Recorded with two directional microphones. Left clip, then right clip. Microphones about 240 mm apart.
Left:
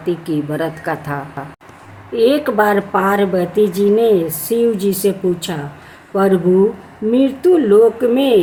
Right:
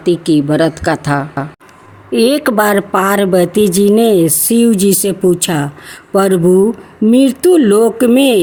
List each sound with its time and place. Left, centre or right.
0.0 s speech: right